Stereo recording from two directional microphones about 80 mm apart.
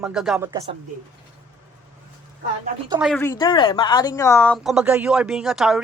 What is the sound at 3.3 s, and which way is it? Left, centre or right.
Speech, left.